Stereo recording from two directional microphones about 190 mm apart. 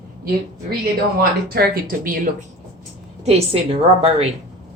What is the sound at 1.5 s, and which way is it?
Speech, 50° right (ahead or behind).